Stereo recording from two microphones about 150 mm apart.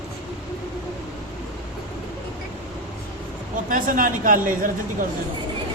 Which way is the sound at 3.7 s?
65° right (ahead or behind).